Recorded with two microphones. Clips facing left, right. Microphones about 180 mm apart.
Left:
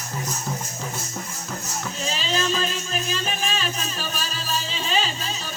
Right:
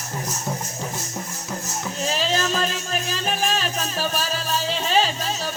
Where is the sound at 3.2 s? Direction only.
55° right (ahead or behind).